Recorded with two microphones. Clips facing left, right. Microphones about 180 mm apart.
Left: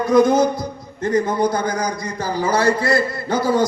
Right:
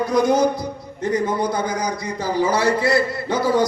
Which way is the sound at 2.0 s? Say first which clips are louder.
Right 1 dB; 40° left (ahead or behind).